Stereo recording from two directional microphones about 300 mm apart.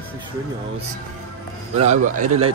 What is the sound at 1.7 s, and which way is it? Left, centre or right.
Speech, right.